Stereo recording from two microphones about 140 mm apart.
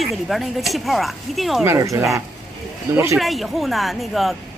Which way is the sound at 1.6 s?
20° right (ahead or behind).